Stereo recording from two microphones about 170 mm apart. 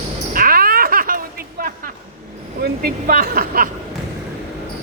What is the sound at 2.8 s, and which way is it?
Speech, 60° right (ahead or behind).